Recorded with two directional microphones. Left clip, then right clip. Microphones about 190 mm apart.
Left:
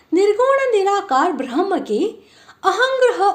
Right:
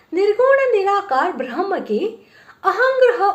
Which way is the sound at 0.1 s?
40° left (ahead or behind).